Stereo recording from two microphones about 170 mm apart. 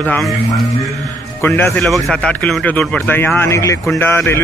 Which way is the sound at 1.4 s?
10° left (ahead or behind).